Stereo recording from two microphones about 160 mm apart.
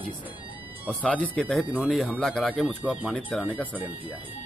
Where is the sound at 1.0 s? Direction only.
10° left (ahead or behind).